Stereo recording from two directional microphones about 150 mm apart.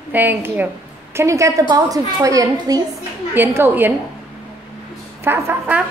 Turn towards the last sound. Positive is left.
turn(degrees=-15)  # may be behind; listen again after turning